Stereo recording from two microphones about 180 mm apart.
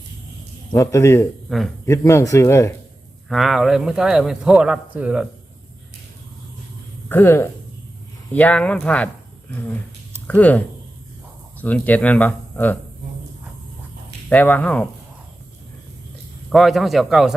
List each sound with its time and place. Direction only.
0.7 s speech: 15° left (ahead or behind)
1.5 s a man's voice: centre (ahead or behind)
1.8 s speech: 15° left (ahead or behind)
3.2 s a man's voice: centre (ahead or behind)
7.1 s speech: 15° left (ahead or behind)
10.2 s speech: 10° left (ahead or behind)
11.6 s speech: 10° left (ahead or behind)
14.3 s speech: 10° left (ahead or behind)
16.5 s a man's voice: centre (ahead or behind)